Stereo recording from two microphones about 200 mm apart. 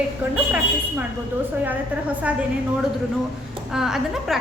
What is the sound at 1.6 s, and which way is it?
Speech, 10° right (ahead or behind).